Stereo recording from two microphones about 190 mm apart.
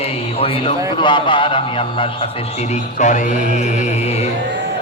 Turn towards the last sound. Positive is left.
turn(degrees=40)  # may be behind; listen again after turning